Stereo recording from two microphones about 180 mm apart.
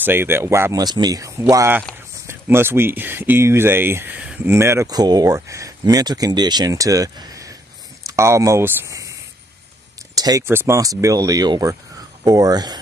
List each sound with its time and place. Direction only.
0.0 s speech: 10° right (ahead or behind)
10.1 s speech: 20° right (ahead or behind)